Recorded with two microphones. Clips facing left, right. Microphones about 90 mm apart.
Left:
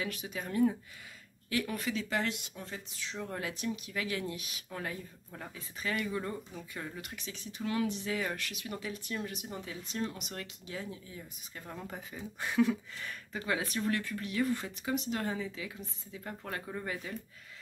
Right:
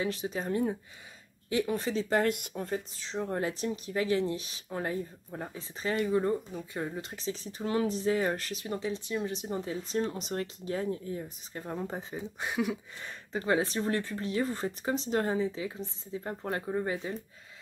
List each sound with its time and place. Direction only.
0.0 s speech: 30° right (ahead or behind)